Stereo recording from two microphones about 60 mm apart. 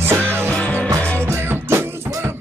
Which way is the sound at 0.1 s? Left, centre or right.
Right.